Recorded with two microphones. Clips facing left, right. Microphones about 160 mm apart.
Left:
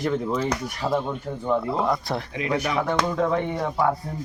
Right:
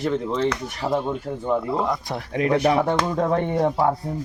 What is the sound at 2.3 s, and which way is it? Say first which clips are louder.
Speech: right 7 dB; 50° right (ahead or behind).